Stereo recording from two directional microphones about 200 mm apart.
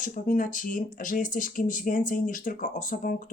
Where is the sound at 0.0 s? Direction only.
40° left (ahead or behind).